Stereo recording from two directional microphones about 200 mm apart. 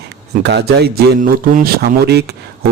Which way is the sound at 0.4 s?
55° right (ahead or behind).